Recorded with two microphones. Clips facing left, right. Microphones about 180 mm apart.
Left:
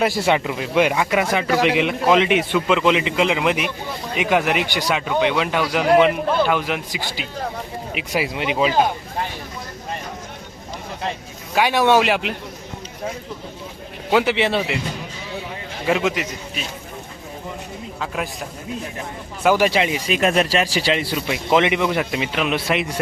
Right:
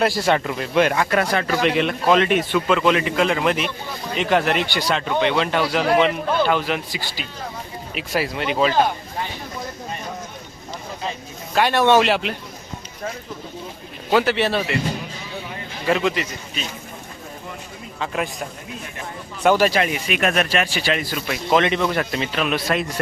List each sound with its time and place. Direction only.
0.1 s a man's voice: 15° left (ahead or behind)
1.7 s speech: 10° left (ahead or behind)
8.1 s speech: 15° left (ahead or behind)
11.5 s speech: 10° left (ahead or behind)
14.1 s speech: 15° left (ahead or behind)
15.9 s speech: 10° left (ahead or behind)
18.0 s a man's voice: centre (ahead or behind)
19.5 s speech: 15° left (ahead or behind)
20.1 s speech: 30° left (ahead or behind)
21.2 s speech: 15° left (ahead or behind)